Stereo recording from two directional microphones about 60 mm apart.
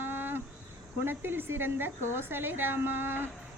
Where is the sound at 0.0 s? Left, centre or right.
Right.